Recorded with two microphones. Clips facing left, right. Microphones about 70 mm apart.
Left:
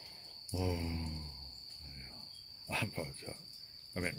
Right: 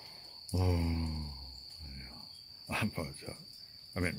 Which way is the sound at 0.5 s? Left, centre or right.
Right.